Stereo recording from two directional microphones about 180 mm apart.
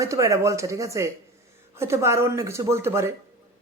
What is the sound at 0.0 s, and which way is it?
A man's voice, 15° right (ahead or behind).